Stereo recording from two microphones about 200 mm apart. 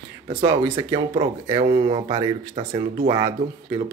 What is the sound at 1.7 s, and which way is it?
Speech, 30° right (ahead or behind).